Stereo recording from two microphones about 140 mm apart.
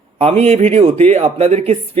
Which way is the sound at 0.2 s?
50° right (ahead or behind).